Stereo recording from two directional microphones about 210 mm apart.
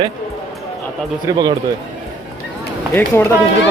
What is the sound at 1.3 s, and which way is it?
Speech, 20° right (ahead or behind).